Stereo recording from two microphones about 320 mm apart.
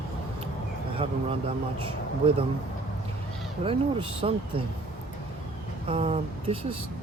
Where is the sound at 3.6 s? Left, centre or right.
Centre.